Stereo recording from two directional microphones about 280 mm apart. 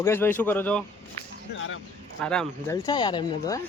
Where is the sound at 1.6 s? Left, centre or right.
Left.